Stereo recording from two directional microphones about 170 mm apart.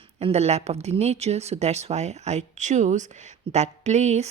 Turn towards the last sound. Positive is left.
turn(degrees=-40)  # may be behind; listen again after turning